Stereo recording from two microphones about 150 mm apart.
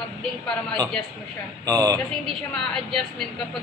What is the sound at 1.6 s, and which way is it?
Speech, 25° right (ahead or behind).